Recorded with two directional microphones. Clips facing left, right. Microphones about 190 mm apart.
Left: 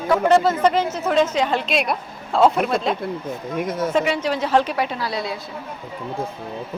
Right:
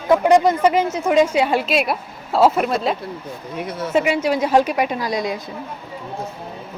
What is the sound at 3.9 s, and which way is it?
A woman's voice, 10° right (ahead or behind).